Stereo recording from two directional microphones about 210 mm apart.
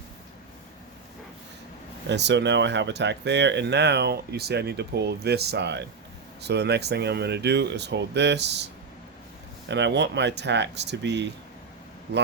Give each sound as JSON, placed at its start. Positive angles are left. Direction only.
{"t": 2.0, "sound": "speech", "side_deg": -55}
{"t": 9.6, "sound": "speech", "side_deg": -55}